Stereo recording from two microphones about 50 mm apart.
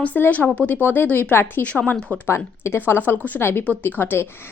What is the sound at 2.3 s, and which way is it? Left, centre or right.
Speech, left.